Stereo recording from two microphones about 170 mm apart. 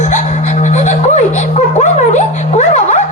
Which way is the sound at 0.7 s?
45° left (ahead or behind).